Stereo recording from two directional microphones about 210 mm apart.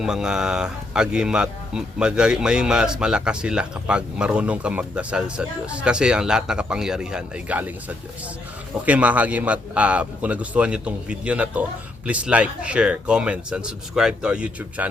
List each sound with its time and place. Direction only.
0.0 s a man's voice: 5° right (ahead or behind)